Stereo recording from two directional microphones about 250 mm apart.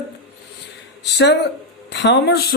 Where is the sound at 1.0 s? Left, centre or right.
Left.